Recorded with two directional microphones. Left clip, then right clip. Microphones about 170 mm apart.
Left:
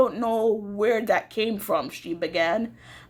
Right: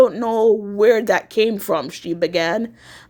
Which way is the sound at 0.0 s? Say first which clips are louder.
Right 7 dB; 40° right (ahead or behind).